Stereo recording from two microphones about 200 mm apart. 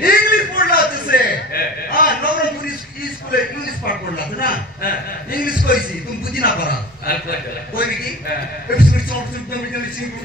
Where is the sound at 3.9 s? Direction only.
45° left (ahead or behind).